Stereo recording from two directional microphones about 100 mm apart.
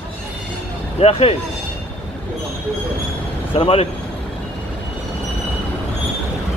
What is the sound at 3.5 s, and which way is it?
Speech, 75° left (ahead or behind).